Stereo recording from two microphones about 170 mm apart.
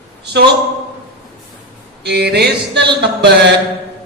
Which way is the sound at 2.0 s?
75° right (ahead or behind).